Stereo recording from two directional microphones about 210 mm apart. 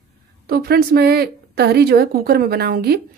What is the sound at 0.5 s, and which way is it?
Speech, 50° right (ahead or behind).